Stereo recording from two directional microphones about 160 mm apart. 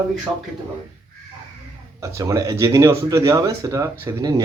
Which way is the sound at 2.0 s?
20° right (ahead or behind).